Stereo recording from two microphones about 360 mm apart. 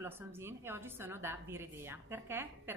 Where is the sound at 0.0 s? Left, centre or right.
Centre.